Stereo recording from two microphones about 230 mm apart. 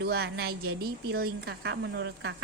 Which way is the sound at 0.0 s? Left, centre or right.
Right.